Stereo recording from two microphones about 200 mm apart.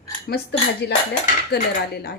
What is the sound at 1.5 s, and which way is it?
Speech, 55° left (ahead or behind).